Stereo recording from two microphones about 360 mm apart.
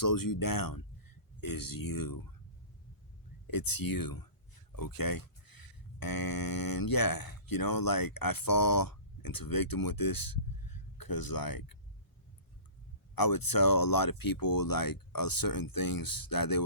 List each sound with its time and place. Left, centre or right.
0.0 s speech: left
3.4 s speech: left
13.1 s speech: left